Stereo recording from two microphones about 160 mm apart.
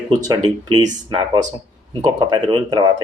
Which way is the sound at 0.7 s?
25° right (ahead or behind).